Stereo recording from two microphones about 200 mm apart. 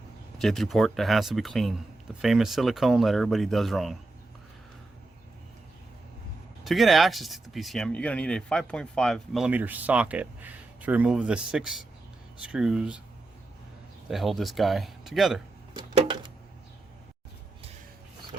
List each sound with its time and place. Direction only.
0.3 s speech: centre (ahead or behind)
6.7 s speech: centre (ahead or behind)
14.1 s speech: centre (ahead or behind)
16.0 s a sound: 25° right (ahead or behind)